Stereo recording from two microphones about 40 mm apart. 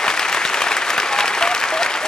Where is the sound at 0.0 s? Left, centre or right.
Centre.